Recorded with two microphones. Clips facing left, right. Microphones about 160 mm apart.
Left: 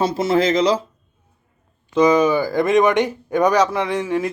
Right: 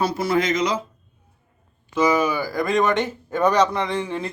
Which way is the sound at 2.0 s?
20° left (ahead or behind).